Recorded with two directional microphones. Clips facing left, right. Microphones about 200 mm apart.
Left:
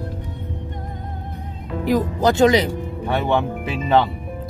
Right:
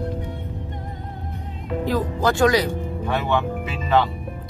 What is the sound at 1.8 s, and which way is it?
A man's voice, 20° left (ahead or behind).